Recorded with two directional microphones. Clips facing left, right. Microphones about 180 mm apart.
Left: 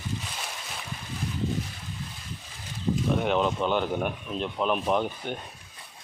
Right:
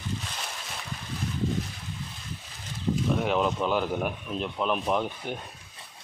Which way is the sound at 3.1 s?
Centre (ahead or behind).